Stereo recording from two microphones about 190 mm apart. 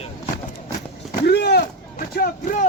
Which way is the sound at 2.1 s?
45° left (ahead or behind).